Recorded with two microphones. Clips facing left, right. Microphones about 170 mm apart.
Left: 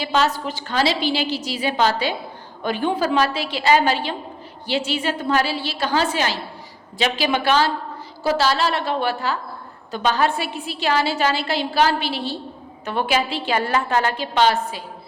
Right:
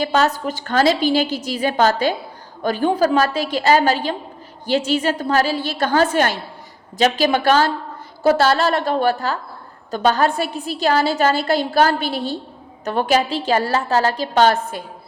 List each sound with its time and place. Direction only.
0.0 s a woman's voice: 45° right (ahead or behind)